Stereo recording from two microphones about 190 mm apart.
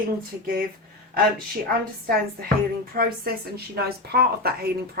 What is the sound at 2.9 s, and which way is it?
A woman's voice, 50° right (ahead or behind).